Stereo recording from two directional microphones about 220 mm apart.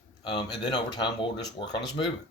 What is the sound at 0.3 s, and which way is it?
Speech, 20° left (ahead or behind).